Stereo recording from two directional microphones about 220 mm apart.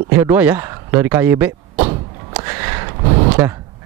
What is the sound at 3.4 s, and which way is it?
Speech, 10° right (ahead or behind).